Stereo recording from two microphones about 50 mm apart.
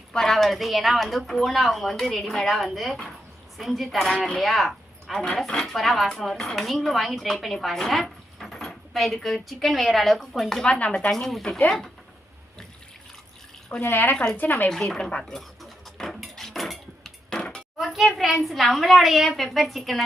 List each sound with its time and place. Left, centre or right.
0.1 s a woman's voice: centre
10.6 s speech: left
11.1 s a woman's voice: centre
13.8 s speech: left
14.7 s speech: centre
15.2 s dishes: centre
17.2 s dishes: centre
17.7 s a woman's voice: centre